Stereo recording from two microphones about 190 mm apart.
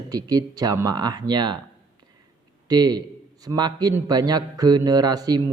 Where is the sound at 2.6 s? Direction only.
20° right (ahead or behind).